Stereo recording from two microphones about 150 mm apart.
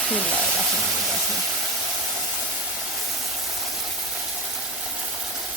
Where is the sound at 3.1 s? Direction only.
Centre (ahead or behind).